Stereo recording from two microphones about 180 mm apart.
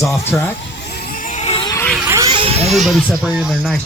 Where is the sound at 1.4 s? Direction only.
30° left (ahead or behind).